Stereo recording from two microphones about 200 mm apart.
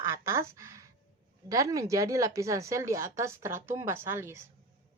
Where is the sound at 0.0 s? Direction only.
15° right (ahead or behind).